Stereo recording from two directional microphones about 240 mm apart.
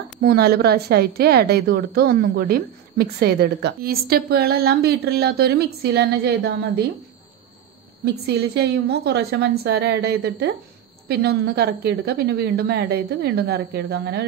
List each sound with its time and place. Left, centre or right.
0.2 s a woman's voice: right
8.0 s a woman's voice: right